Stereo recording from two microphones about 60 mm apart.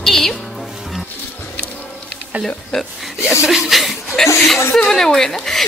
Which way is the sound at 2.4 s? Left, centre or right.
Centre.